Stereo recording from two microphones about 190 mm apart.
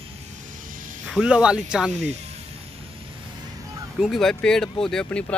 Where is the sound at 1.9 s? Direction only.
35° right (ahead or behind).